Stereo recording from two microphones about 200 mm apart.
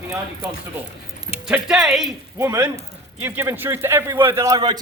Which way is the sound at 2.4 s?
10° right (ahead or behind).